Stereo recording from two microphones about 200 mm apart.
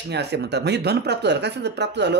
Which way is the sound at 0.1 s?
55° right (ahead or behind).